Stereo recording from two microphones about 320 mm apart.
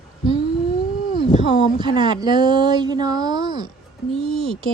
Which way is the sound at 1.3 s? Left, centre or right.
Centre.